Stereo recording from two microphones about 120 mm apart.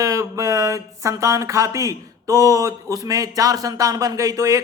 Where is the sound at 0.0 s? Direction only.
25° right (ahead or behind).